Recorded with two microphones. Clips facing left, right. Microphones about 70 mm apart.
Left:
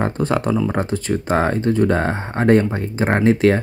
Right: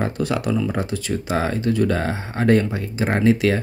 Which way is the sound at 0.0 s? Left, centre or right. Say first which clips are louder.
Left 3 dB; left.